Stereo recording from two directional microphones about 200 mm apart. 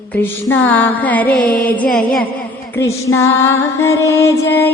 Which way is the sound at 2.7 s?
15° left (ahead or behind).